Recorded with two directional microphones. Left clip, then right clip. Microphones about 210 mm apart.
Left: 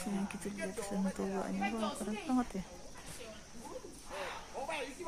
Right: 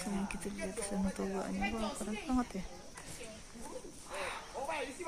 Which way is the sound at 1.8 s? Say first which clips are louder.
Left 1 dB; 35° left (ahead or behind).